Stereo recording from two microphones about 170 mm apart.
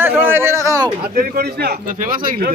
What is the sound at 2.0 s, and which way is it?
Speech, 55° right (ahead or behind).